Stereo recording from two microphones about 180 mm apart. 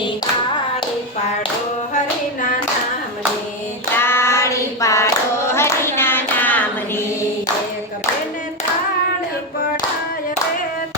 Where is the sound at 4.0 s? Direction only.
15° left (ahead or behind).